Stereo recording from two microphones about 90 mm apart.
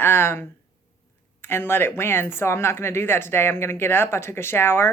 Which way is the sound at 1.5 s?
25° left (ahead or behind).